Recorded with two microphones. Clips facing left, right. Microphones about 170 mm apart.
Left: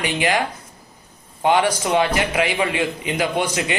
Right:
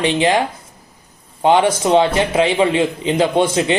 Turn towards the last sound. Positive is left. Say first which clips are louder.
# right 6 dB
turn(degrees=-25)  # may be behind; listen again after turning